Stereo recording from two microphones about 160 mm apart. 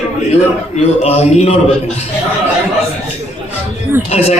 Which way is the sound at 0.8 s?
45° left (ahead or behind).